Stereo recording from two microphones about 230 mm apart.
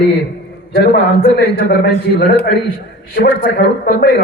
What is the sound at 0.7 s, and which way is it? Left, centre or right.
A man's voice, left.